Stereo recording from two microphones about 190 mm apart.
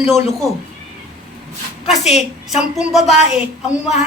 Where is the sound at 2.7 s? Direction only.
Centre (ahead or behind).